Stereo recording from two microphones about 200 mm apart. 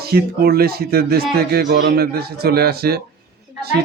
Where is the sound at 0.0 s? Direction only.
50° right (ahead or behind).